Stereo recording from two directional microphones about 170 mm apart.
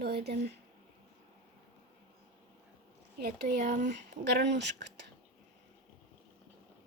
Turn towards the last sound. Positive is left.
turn(degrees=-90)